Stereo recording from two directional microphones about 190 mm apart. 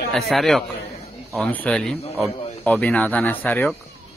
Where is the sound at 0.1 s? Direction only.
Centre (ahead or behind).